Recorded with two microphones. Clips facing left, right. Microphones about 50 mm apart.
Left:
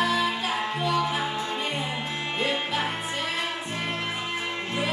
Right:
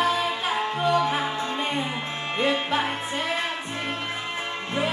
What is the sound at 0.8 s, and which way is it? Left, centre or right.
Music, right.